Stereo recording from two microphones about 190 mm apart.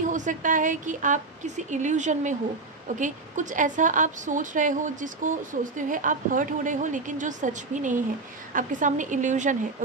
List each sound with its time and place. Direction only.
0.1 s a woman's voice: 40° right (ahead or behind)